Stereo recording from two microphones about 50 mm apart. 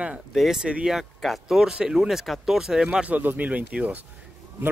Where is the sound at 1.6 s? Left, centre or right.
Centre.